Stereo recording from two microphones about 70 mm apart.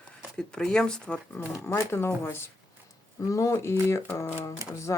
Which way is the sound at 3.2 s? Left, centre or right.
Left.